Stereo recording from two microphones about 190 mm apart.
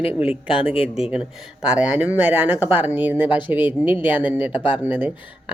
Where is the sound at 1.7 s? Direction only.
10° right (ahead or behind).